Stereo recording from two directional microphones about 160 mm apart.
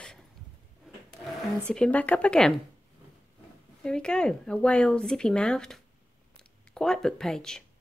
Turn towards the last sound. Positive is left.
turn(degrees=5)  # may be behind; listen again after turning